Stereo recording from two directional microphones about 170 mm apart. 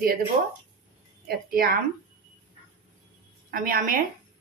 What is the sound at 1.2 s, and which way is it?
Speech, 60° right (ahead or behind).